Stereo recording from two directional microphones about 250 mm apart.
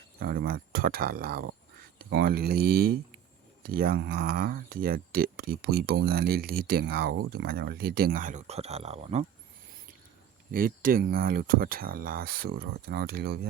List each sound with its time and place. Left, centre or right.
0.2 s speech: right
10.5 s speech: right